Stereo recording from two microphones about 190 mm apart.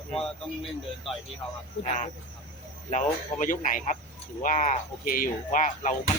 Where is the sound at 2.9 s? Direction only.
40° left (ahead or behind).